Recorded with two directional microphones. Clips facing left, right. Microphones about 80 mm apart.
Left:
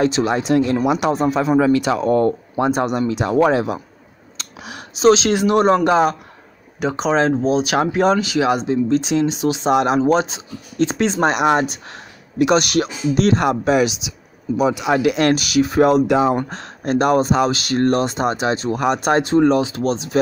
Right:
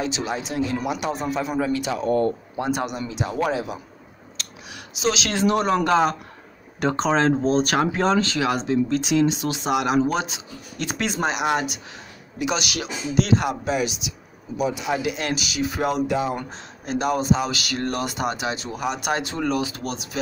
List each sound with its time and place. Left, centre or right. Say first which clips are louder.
0.0 s speech: left 9 dB; left
0.8 s speech: left 8 dB; left
2.7 s speech: left 7 dB; left
4.7 s a sound: left 11 dB; left
5.2 s a man's voice: left 6 dB; centre
11.2 s speech: left 6 dB; left
11.9 s speech: left 5 dB; left
13.7 s speech: left 8 dB; left
14.6 s speech: left 7 dB; left
15.7 s speech: left 11 dB; left
16.4 s speech: left 8 dB; left
17.5 s speech: left 9 dB; left
18.7 s speech: left 10 dB; left
18.9 s speech: left 10 dB; left